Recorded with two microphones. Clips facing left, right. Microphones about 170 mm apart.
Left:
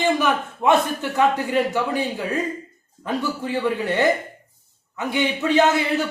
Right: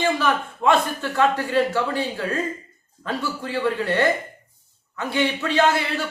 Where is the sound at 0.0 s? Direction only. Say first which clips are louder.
Left 1 dB; 15° left (ahead or behind).